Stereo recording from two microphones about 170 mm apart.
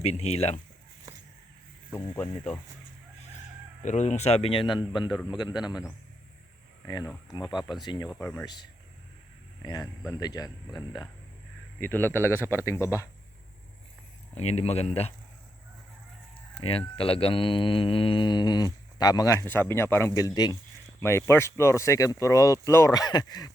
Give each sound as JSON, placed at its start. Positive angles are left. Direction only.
{"t": 0.0, "sound": "speech", "side_deg": 40}
{"t": 3.8, "sound": "speech", "side_deg": 45}
{"t": 5.5, "sound": "a man's voice", "side_deg": 0}
{"t": 6.8, "sound": "speech", "side_deg": 20}
{"t": 9.6, "sound": "speech", "side_deg": 25}
{"t": 11.8, "sound": "speech", "side_deg": 10}
{"t": 14.3, "sound": "speech", "side_deg": 40}
{"t": 16.6, "sound": "speech", "side_deg": 35}